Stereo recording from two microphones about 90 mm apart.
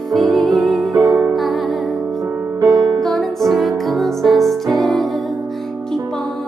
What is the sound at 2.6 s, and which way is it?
Music, 5° left (ahead or behind).